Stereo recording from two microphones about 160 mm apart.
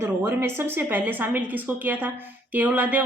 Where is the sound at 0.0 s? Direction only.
15° right (ahead or behind).